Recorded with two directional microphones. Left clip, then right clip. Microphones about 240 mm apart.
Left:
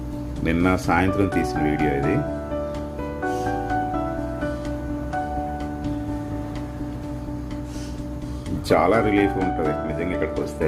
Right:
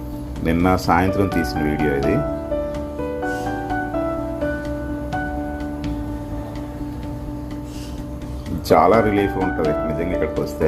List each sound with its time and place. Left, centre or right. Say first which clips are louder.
0.4 s speech: right 3 dB; centre
8.7 s speech: right 4 dB; centre